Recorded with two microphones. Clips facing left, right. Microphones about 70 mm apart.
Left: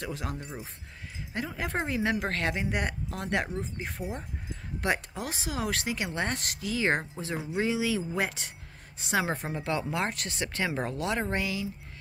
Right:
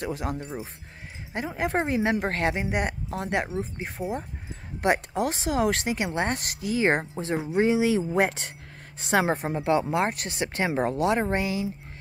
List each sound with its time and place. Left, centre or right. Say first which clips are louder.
0.0 s speech: right 5 dB; centre
4.8 s speech: right 7 dB; right
5.3 s speech: right 5 dB; right
5.9 s a woman's voice: right 4 dB; right
9.4 s speech: right 7 dB; right